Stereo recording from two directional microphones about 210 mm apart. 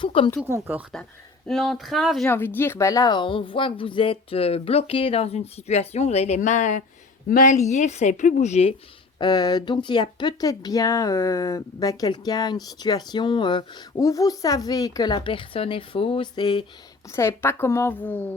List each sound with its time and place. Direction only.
0.0 s speech: 25° left (ahead or behind)
0.4 s speech: 10° right (ahead or behind)
1.5 s speech: centre (ahead or behind); by 8.7 s 30° left (ahead or behind)
9.1 s a woman's voice: 20° left (ahead or behind)